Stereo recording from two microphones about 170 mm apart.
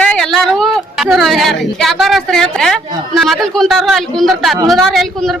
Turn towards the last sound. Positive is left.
turn(degrees=0)  # may be behind; listen again after turning